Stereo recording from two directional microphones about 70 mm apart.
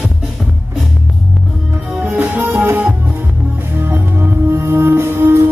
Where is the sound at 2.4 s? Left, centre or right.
Right.